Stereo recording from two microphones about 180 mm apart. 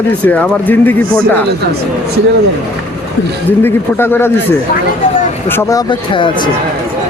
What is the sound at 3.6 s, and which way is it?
Speech, 10° left (ahead or behind).